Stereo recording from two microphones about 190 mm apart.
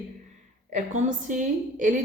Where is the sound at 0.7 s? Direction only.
40° right (ahead or behind).